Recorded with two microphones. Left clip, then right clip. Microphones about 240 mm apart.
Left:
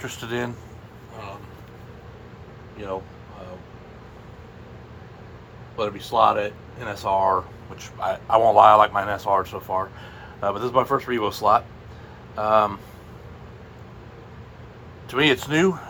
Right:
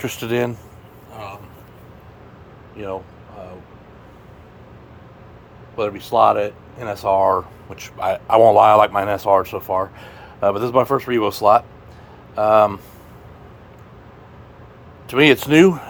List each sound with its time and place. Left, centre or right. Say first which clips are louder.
0.0 s speech: right 7 dB; right
5.7 s speech: right 4 dB; right
15.0 s speech: right 6 dB; right